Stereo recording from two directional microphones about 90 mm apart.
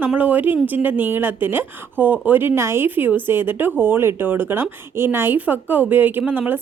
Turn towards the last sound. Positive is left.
turn(degrees=-20)  # may be behind; listen again after turning